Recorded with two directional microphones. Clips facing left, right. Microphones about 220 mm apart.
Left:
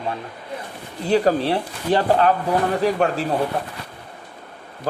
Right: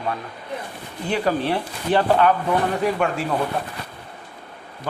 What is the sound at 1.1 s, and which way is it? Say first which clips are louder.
Speech: left 4 dB; 35° left (ahead or behind).